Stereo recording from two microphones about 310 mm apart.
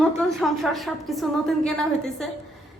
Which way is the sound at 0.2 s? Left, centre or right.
Centre.